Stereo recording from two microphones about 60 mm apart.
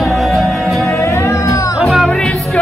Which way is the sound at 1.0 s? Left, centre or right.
Left.